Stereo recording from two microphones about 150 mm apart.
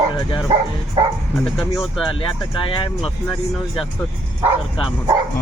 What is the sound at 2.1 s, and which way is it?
Speech, 35° left (ahead or behind).